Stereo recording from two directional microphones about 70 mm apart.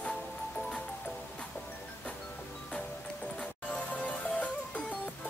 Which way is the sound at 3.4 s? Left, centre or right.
Centre.